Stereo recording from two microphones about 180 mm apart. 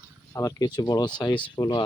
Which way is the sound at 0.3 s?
20° left (ahead or behind).